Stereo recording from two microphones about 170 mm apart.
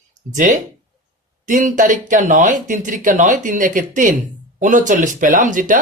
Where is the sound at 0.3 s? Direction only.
50° right (ahead or behind).